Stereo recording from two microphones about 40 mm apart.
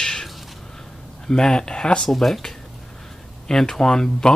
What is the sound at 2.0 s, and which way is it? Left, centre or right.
Speech, centre.